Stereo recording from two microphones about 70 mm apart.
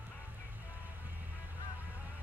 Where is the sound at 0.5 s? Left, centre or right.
Right.